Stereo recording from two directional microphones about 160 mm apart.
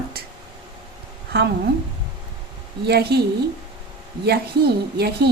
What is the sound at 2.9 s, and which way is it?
Speech, 90° right.